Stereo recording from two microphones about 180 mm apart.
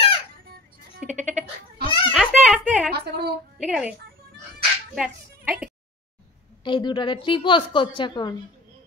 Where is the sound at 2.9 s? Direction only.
60° right (ahead or behind).